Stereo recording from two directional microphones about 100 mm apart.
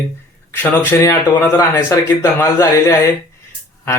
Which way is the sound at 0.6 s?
20° left (ahead or behind).